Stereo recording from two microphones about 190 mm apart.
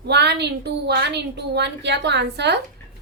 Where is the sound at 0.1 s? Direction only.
60° right (ahead or behind).